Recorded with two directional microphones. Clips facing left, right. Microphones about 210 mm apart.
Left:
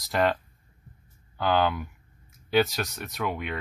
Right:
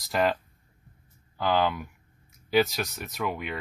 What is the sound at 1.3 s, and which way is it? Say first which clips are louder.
Speech: left 1 dB; centre (ahead or behind).